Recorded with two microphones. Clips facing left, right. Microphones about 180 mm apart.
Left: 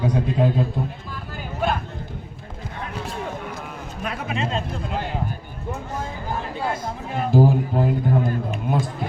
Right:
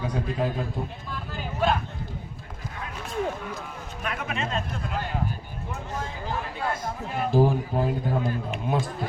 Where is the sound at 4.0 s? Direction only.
35° left (ahead or behind).